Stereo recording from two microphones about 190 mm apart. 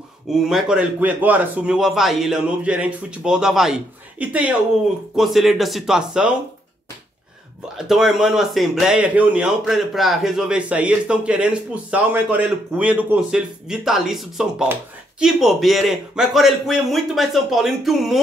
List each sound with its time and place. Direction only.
0.3 s speech: centre (ahead or behind)
7.6 s speech: centre (ahead or behind)